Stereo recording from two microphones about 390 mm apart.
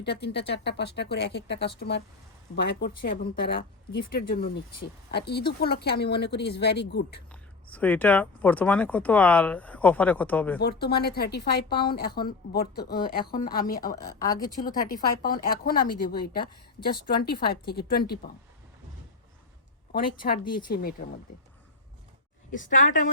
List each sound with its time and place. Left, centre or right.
0.0 s a woman's voice: left
7.7 s speech: centre
10.6 s a woman's voice: left
19.9 s a woman's voice: left
22.5 s a woman's voice: centre